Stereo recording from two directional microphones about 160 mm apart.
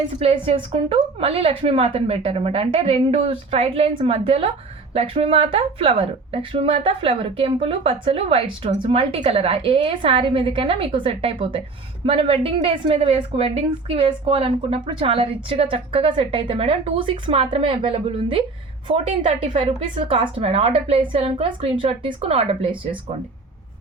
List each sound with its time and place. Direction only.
0.2 s a woman's voice: 35° right (ahead or behind)